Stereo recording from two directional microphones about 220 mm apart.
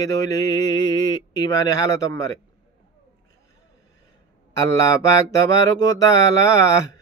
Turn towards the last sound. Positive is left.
turn(degrees=15)  # may be behind; listen again after turning